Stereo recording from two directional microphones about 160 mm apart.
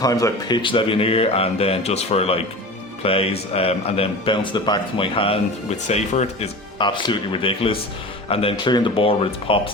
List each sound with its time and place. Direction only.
0.0 s speech: 20° left (ahead or behind); by 6.5 s 45° left (ahead or behind)
6.7 s speech: 30° left (ahead or behind)